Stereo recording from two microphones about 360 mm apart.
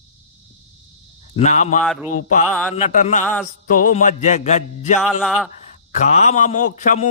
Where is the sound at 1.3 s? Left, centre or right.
Centre.